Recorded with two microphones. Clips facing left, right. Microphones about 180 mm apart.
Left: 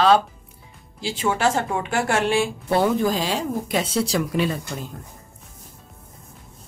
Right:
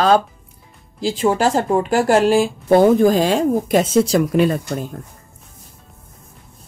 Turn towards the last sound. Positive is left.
turn(degrees=-50)  # may be behind; listen again after turning